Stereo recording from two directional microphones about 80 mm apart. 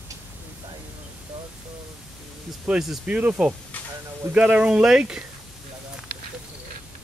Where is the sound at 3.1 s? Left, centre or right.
Centre.